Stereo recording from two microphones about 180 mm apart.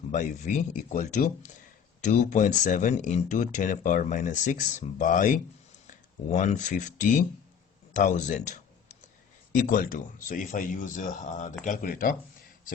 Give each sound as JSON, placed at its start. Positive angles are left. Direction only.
{"t": 0.1, "sound": "speech", "side_deg": 45}